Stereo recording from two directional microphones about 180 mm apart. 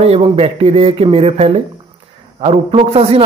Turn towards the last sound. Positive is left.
turn(degrees=-35)  # may be behind; listen again after turning